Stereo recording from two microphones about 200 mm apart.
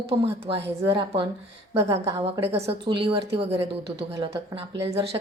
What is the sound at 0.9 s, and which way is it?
Speech, 25° right (ahead or behind).